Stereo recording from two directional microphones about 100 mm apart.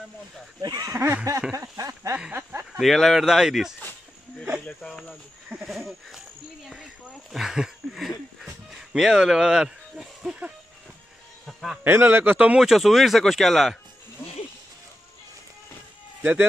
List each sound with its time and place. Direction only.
0.6 s speech: 40° right (ahead or behind)
1.5 s a sound: 35° right (ahead or behind)
2.8 s speech: centre (ahead or behind)
6.7 s a sound: centre (ahead or behind)
8.5 s music: 5° right (ahead or behind)
11.4 s a sound: centre (ahead or behind)
11.8 s a man's voice: 20° right (ahead or behind)
12.6 s speech: centre (ahead or behind)
16.2 s speech: 15° right (ahead or behind)